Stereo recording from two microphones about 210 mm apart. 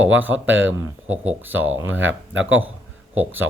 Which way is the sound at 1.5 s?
70° right (ahead or behind).